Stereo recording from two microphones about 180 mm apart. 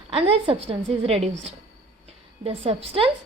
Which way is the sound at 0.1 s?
30° right (ahead or behind).